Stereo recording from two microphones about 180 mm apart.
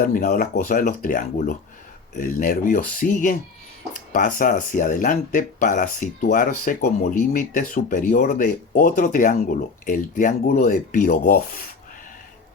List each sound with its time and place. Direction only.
0.0 s speech: 50° left (ahead or behind)